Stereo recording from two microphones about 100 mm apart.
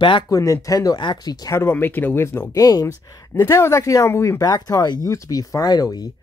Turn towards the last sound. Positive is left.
turn(degrees=40)  # may be behind; listen again after turning